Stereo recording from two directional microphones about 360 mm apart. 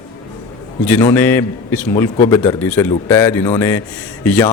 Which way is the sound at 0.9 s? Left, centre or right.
Centre.